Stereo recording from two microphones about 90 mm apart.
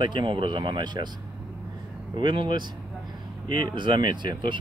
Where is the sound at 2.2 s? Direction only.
60° right (ahead or behind).